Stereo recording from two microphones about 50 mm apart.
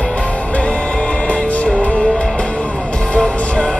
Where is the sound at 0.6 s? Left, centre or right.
Left.